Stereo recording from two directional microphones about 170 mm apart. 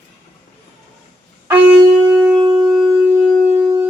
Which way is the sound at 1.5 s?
10° right (ahead or behind).